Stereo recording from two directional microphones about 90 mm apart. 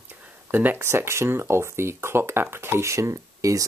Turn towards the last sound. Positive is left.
turn(degrees=-35)  # may be behind; listen again after turning